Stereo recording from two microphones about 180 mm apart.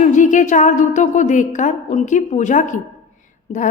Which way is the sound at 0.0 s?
45° left (ahead or behind).